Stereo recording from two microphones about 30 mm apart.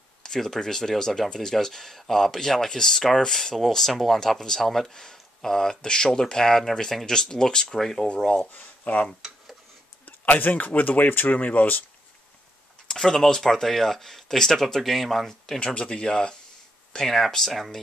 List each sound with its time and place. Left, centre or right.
0.2 s speech: centre
3.9 s speech: centre
4.4 s speech: centre
8.5 s speech: left
10.0 s speech: left
11.3 s speech: left
12.9 s speech: centre
15.2 s speech: centre
15.6 s speech: left
16.0 s speech: left